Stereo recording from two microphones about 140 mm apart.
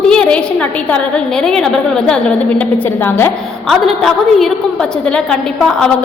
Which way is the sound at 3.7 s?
Centre (ahead or behind).